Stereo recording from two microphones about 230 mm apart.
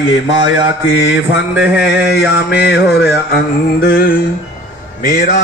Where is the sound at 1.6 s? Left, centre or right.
Centre.